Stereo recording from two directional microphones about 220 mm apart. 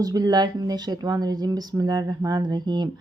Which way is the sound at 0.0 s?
15° right (ahead or behind).